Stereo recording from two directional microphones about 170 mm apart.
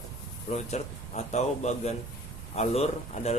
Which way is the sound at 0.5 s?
40° left (ahead or behind).